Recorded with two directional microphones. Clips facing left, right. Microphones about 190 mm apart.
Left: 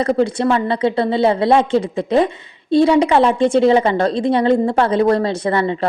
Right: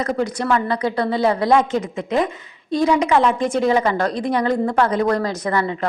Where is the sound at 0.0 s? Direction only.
30° left (ahead or behind).